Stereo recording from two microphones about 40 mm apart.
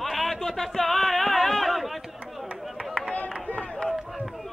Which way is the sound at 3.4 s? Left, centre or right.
Left.